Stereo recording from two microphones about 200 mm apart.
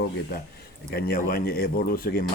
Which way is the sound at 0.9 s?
50° left (ahead or behind).